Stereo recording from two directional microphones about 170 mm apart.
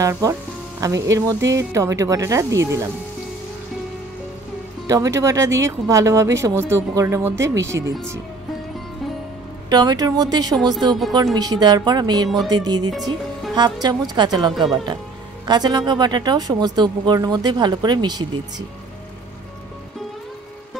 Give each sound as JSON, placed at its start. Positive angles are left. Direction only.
{"t": 0.0, "sound": "speech", "side_deg": -20}
{"t": 4.8, "sound": "speech", "side_deg": -20}
{"t": 9.7, "sound": "speech", "side_deg": -25}